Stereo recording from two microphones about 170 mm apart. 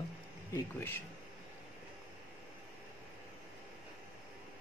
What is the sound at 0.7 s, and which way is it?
Speech, 15° left (ahead or behind).